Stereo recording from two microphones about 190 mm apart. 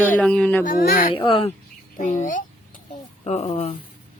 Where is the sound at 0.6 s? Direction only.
50° left (ahead or behind).